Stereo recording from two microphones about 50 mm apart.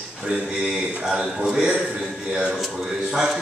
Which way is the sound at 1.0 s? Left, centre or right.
Centre.